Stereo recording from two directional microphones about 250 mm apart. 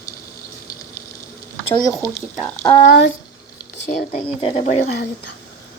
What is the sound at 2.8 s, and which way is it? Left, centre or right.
Speech, left.